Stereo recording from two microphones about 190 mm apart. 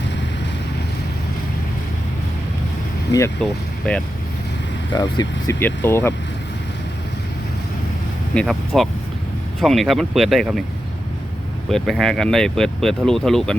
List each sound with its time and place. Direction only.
3.1 s speech: 15° left (ahead or behind)
3.4 s speech: 5° left (ahead or behind)
4.9 s speech: 20° left (ahead or behind)
8.3 s speech: 5° left (ahead or behind)
11.7 s speech: centre (ahead or behind)